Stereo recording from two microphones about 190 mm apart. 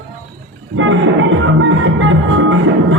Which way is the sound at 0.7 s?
90° right.